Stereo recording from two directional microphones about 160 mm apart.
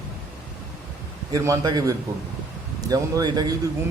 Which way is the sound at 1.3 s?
25° right (ahead or behind).